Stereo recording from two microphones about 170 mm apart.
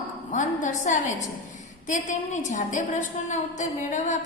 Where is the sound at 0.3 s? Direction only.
50° left (ahead or behind).